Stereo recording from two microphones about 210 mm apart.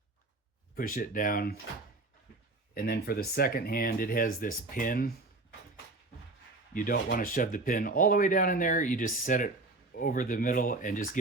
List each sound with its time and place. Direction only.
0.8 s speech: 40° left (ahead or behind)
2.7 s speech: 45° left (ahead or behind)
6.7 s speech: 40° left (ahead or behind)